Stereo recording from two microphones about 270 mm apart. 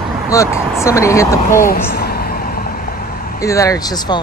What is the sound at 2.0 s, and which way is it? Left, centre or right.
Vehicle, left.